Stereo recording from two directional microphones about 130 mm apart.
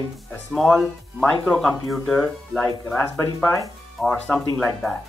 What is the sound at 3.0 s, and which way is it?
Speech, 20° left (ahead or behind).